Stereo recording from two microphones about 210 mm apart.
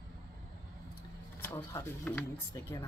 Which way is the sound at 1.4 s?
10° left (ahead or behind).